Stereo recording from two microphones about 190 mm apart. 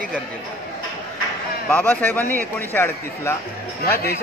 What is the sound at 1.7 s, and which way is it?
A man's voice, 10° left (ahead or behind).